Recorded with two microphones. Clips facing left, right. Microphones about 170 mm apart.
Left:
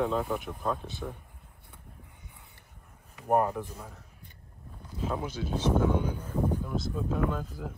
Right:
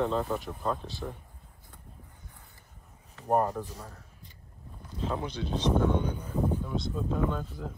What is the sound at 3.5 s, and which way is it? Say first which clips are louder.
A man's voice: even; 15° left (ahead or behind).